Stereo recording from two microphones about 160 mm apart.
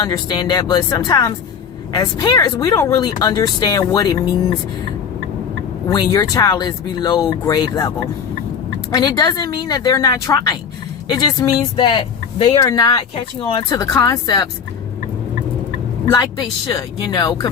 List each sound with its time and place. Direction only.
0.0 s speech: 25° left (ahead or behind)
5.9 s speech: 25° left (ahead or behind)
16.0 s speech: 25° left (ahead or behind)